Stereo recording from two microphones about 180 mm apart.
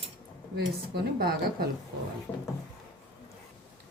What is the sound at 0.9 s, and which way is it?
Speech, 60° right (ahead or behind).